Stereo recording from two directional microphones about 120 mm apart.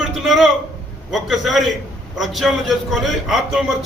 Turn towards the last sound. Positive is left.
turn(degrees=0)  # may be behind; listen again after turning